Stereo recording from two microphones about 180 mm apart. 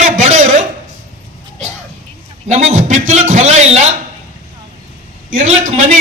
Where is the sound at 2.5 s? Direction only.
40° right (ahead or behind).